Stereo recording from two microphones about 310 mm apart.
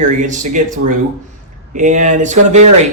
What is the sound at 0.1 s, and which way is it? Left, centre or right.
Speech, right.